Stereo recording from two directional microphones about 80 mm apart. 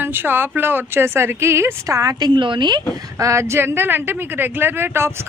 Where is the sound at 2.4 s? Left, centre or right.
Right.